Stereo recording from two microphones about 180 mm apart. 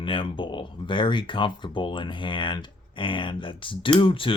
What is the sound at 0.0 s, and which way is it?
Speech, 30° left (ahead or behind).